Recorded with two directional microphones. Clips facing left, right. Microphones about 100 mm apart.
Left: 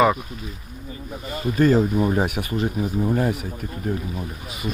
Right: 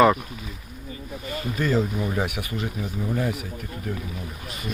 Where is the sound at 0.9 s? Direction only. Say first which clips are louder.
Left 1 dB; 30° left (ahead or behind).